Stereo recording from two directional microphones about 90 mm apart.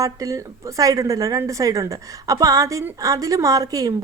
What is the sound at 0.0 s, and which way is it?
Speech, 35° right (ahead or behind).